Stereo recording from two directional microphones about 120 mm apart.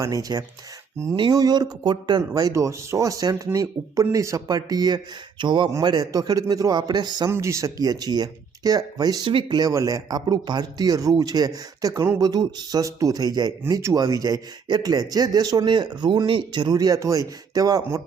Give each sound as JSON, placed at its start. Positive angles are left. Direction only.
{"t": 0.0, "sound": "speech", "side_deg": -30}
{"t": 7.3, "sound": "speech", "side_deg": -25}